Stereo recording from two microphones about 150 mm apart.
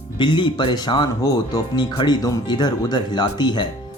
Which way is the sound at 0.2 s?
30° left (ahead or behind).